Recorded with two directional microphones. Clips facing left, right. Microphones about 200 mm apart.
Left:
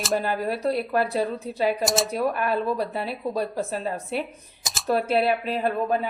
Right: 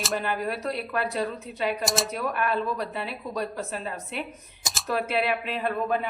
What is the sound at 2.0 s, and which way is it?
A woman's voice, 35° left (ahead or behind).